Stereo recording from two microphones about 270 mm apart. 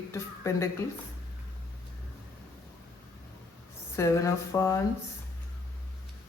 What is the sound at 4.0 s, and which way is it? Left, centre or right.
Speech, centre.